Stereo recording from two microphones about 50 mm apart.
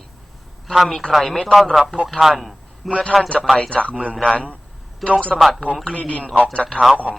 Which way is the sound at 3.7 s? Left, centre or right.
Left.